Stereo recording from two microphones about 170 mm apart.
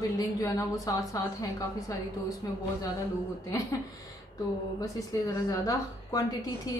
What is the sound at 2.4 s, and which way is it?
Speech, 20° left (ahead or behind).